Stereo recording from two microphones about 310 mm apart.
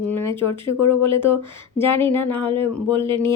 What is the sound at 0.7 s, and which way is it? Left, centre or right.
Speech, left.